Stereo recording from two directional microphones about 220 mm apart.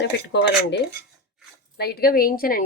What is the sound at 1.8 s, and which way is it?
Speech, 45° left (ahead or behind).